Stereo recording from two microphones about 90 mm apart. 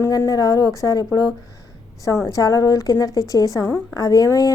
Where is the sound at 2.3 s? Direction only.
40° left (ahead or behind).